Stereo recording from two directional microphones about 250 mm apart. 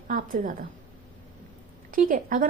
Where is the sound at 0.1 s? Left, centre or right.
Right.